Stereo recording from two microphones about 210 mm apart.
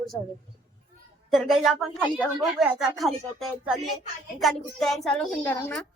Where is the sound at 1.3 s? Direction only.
Centre (ahead or behind).